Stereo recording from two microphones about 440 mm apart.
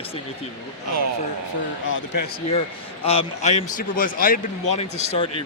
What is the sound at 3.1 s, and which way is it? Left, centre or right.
Speech, centre.